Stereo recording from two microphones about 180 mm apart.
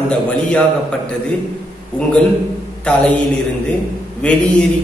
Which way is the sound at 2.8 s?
5° left (ahead or behind).